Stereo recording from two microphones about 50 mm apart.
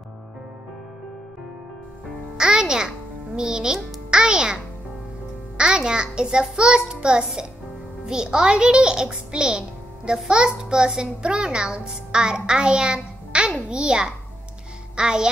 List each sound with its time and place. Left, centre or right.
2.3 s music: centre
3.3 s a child's voice: centre
5.6 s a child's voice: centre